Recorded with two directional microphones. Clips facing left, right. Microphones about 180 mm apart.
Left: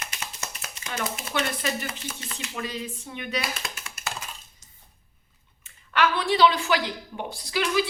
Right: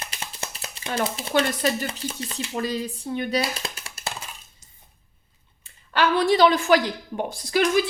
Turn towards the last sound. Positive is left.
turn(degrees=-45)  # may be behind; listen again after turning